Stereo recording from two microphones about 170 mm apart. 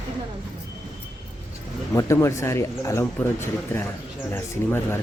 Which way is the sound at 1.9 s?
15° left (ahead or behind).